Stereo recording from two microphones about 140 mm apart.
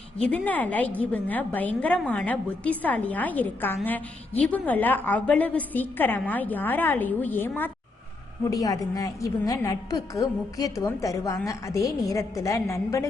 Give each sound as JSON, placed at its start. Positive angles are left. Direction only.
{"t": 0.2, "sound": "a woman's voice", "side_deg": 10}
{"t": 8.4, "sound": "a woman's voice", "side_deg": 25}